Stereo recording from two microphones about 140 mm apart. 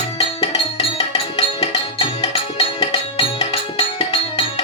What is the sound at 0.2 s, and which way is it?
Music, 40° left (ahead or behind).